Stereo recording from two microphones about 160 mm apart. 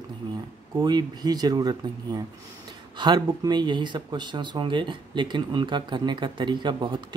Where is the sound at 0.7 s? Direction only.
25° right (ahead or behind).